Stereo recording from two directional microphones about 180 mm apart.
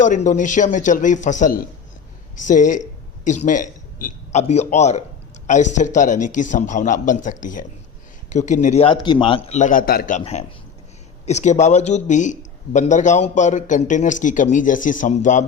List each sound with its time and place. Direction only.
0.0 s a man's voice: 45° left (ahead or behind); by 9.6 s 30° left (ahead or behind)
9.6 s a man's voice: 45° left (ahead or behind)
10.2 s a man's voice: 40° left (ahead or behind)